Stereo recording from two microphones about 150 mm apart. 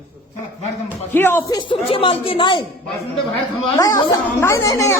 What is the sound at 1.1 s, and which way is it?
Speech, 15° left (ahead or behind).